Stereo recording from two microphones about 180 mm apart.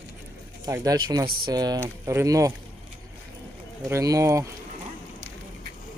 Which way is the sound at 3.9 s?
20° right (ahead or behind).